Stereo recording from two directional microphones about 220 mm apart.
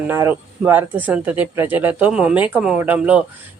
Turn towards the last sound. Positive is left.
turn(degrees=-5)  # may be behind; listen again after turning